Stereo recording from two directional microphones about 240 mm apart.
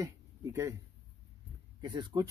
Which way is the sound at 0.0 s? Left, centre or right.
Centre.